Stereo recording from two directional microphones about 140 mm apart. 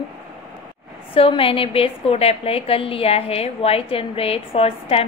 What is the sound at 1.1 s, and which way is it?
A woman's voice, 40° left (ahead or behind).